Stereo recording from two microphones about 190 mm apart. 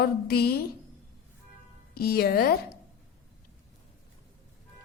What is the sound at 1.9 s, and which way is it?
Speech, 50° left (ahead or behind).